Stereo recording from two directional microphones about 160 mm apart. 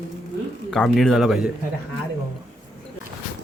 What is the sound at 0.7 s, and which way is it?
Speech, centre (ahead or behind).